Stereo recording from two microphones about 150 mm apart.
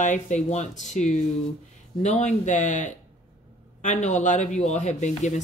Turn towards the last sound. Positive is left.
turn(degrees=50)  # may be behind; listen again after turning